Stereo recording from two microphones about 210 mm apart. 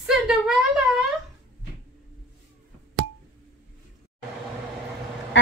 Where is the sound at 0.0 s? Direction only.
5° right (ahead or behind).